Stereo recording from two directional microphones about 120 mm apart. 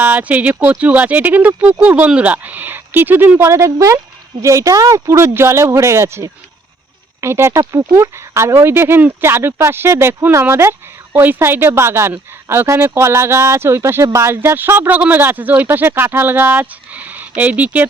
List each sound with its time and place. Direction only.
0.0 s speech: 15° right (ahead or behind)